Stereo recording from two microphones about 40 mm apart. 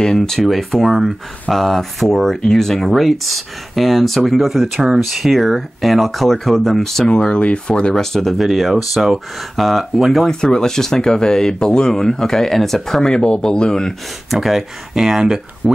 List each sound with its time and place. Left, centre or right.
0.0 s speech: centre
0.5 s speech: centre
7.1 s speech: left
7.9 s speech: centre
10.2 s speech: centre
13.1 s speech: left
14.3 s speech: centre